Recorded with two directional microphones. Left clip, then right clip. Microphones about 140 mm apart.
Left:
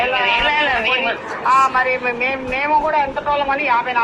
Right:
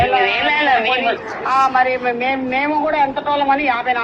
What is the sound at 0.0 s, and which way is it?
A man's voice, 15° right (ahead or behind).